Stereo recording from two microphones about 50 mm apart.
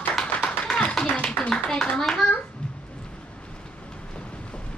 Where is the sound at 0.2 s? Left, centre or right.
Centre.